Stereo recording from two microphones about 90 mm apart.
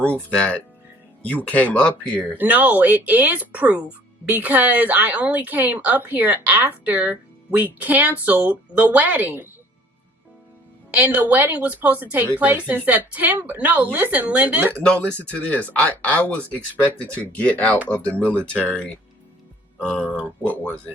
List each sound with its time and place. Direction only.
0.0 s speech: 15° left (ahead or behind)
2.4 s speech: 15° right (ahead or behind)
10.9 s speech: 20° right (ahead or behind)
14.8 s speech: 15° left (ahead or behind)